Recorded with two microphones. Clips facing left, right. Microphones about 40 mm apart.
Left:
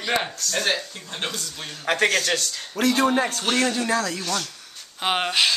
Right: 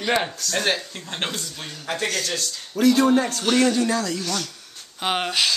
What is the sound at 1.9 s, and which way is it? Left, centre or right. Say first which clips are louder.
Speech: left 5 dB; left.